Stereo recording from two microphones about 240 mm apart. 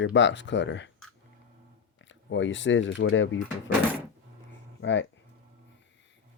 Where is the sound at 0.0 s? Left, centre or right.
Left.